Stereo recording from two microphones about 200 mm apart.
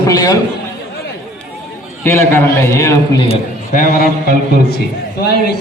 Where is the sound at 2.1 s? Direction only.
10° left (ahead or behind).